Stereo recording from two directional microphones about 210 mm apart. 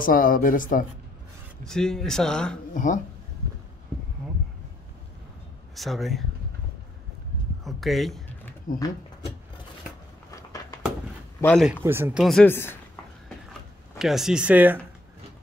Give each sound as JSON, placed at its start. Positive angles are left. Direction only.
{"t": 0.0, "sound": "speech", "side_deg": 40}
{"t": 1.6, "sound": "speech", "side_deg": 0}
{"t": 2.7, "sound": "speech", "side_deg": 35}
{"t": 5.8, "sound": "speech", "side_deg": 0}
{"t": 7.6, "sound": "speech", "side_deg": 0}
{"t": 8.7, "sound": "speech", "side_deg": 40}
{"t": 11.4, "sound": "speech", "side_deg": 5}
{"t": 11.8, "sound": "speech", "side_deg": -10}
{"t": 13.5, "sound": "a sound", "side_deg": 0}